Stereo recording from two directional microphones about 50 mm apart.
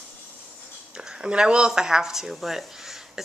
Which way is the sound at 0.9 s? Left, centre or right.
Centre.